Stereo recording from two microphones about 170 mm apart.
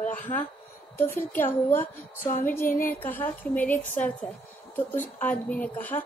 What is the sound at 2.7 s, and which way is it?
Speech, 55° left (ahead or behind).